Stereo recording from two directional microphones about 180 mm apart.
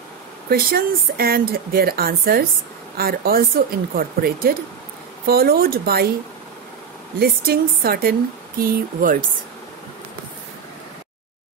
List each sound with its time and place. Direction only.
0.5 s a woman's voice: 55° right (ahead or behind)
7.2 s a woman's voice: 55° right (ahead or behind)